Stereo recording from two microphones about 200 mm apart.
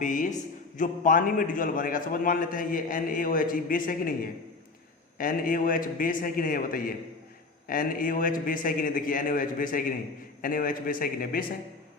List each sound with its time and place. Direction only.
0.0 s a man's voice: 40° left (ahead or behind)